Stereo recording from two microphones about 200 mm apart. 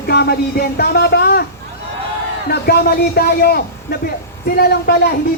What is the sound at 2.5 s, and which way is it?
A man's voice, 55° left (ahead or behind).